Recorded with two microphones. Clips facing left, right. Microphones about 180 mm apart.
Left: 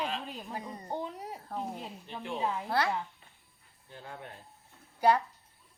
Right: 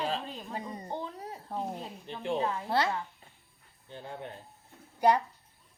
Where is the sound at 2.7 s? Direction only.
20° right (ahead or behind).